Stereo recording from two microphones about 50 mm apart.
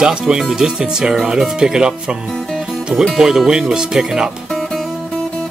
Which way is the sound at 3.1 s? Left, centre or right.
Centre.